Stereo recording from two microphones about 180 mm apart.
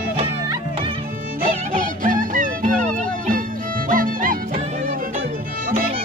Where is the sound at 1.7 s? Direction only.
50° right (ahead or behind).